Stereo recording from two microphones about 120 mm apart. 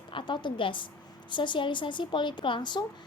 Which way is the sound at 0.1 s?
45° left (ahead or behind).